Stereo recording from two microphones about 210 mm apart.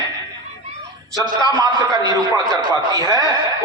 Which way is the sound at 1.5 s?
20° right (ahead or behind).